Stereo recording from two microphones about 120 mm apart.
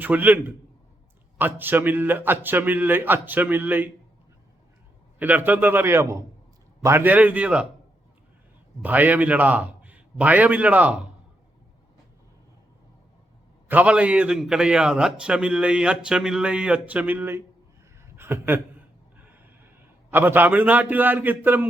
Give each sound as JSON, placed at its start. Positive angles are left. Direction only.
{"t": 0.0, "sound": "a man's voice", "side_deg": -15}
{"t": 5.2, "sound": "a man's voice", "side_deg": -15}
{"t": 8.8, "sound": "a man's voice", "side_deg": -15}
{"t": 13.7, "sound": "a man's voice", "side_deg": -10}